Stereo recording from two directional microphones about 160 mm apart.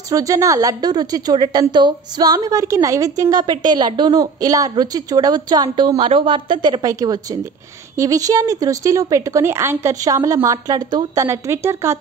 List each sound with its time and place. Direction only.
0.1 s a woman's voice: 20° right (ahead or behind)